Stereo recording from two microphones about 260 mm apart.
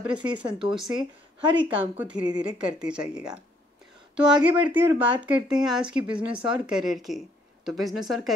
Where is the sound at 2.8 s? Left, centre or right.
Centre.